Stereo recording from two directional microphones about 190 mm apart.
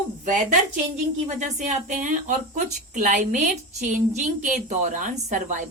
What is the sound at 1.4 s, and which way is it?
A woman's voice, 40° right (ahead or behind).